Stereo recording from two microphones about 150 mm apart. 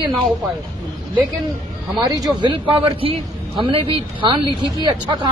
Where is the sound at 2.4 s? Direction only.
35° right (ahead or behind).